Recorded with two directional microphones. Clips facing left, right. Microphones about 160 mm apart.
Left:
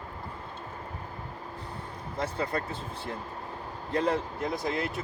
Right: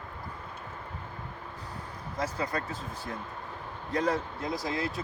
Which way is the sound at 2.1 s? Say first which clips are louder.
Left 1 dB; 30° left (ahead or behind).